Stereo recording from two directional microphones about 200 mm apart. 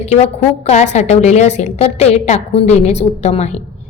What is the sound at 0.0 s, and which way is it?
A woman's voice, 35° left (ahead or behind).